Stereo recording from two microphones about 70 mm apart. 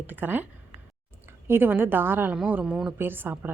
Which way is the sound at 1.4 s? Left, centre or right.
Right.